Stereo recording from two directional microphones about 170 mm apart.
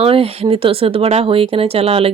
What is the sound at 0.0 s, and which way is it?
Speech, 35° right (ahead or behind).